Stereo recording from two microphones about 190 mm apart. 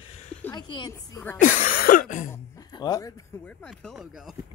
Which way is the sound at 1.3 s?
45° left (ahead or behind).